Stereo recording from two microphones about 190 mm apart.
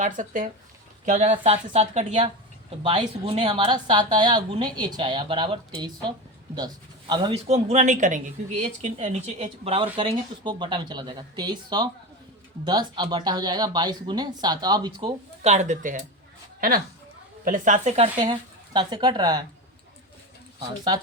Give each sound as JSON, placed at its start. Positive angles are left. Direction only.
{"t": 0.0, "sound": "speech", "side_deg": -40}
{"t": 2.8, "sound": "speech", "side_deg": -25}
{"t": 20.6, "sound": "speech", "side_deg": -20}